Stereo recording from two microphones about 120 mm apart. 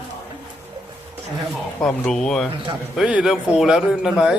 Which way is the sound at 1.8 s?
5° left (ahead or behind).